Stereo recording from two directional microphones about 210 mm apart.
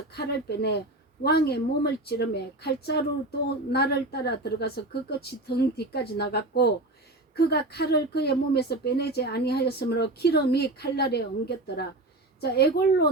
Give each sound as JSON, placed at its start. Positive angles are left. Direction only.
{"t": 0.1, "sound": "a woman's voice", "side_deg": 50}